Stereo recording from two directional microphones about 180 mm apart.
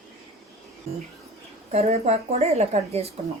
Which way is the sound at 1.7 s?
35° right (ahead or behind).